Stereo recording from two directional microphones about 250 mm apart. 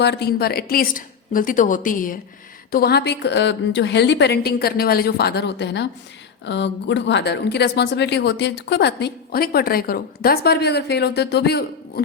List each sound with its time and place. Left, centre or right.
0.0 s a woman's voice: left